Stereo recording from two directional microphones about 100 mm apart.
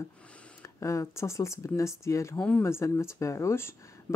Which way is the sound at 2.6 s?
25° left (ahead or behind).